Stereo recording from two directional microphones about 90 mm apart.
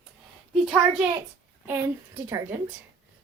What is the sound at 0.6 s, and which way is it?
Speech, 5° right (ahead or behind).